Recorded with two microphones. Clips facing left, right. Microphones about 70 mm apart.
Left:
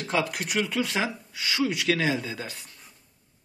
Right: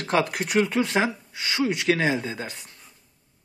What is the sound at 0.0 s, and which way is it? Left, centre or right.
A man's voice, right.